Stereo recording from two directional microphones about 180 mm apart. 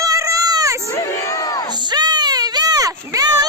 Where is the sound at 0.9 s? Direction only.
15° left (ahead or behind).